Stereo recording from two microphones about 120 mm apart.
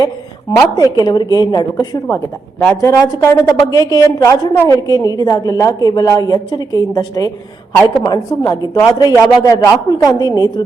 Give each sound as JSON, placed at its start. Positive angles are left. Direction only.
{"t": 0.8, "sound": "a woman's voice", "side_deg": 35}
{"t": 2.6, "sound": "a woman's voice", "side_deg": 15}
{"t": 2.9, "sound": "a woman's voice", "side_deg": 30}